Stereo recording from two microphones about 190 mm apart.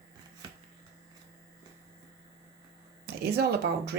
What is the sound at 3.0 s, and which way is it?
Speech, 55° right (ahead or behind).